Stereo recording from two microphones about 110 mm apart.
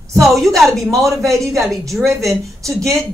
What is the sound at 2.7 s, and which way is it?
Speech, 25° right (ahead or behind).